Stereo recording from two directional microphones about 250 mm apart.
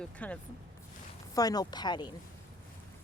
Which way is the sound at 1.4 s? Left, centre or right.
Centre.